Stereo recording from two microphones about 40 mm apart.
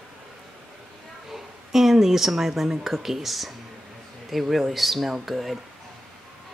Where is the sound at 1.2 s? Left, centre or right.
Centre.